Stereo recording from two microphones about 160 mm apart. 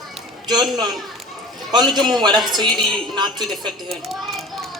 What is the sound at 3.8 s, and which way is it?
Children playing, centre (ahead or behind).